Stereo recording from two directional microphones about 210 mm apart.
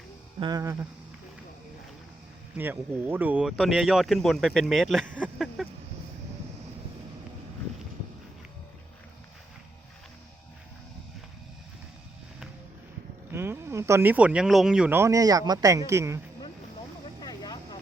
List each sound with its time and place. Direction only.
0.3 s speech: 20° right (ahead or behind)
2.6 s speech: 10° right (ahead or behind)
13.3 s speech: 10° right (ahead or behind)
17.2 s vehicle: 20° left (ahead or behind)